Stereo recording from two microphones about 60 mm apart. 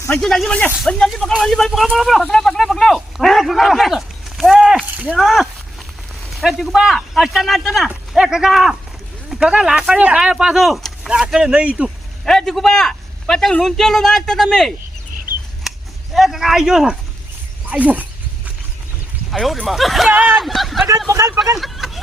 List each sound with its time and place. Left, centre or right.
0.1 s a man's voice: centre
0.9 s a man's voice: centre
4.9 s speech: right
5.1 s speech: centre
9.4 s speech: centre
12.2 s a man's voice: centre
16.1 s speech: centre
17.7 s speech: right
19.3 s speech: centre
20.1 s speech: right
20.3 s speech: centre
21.1 s speech: right
21.6 s vehicle: centre